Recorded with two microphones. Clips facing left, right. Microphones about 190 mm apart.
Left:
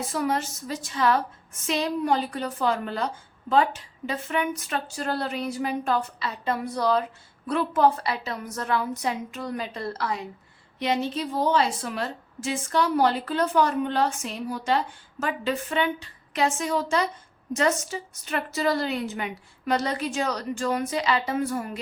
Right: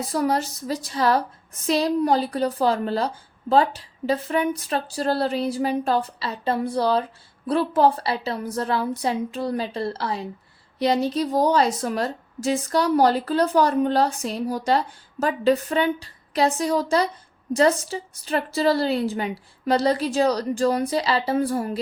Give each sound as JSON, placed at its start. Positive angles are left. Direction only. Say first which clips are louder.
{"t": 0.1, "sound": "a woman's voice", "louder": "right 5 dB", "side_deg": -35}